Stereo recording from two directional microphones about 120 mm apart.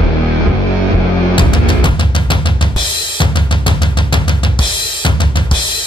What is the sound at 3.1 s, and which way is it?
Drum kit, 40° left (ahead or behind).